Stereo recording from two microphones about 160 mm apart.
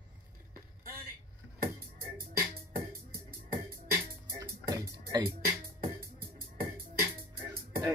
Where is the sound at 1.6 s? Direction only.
65° right (ahead or behind).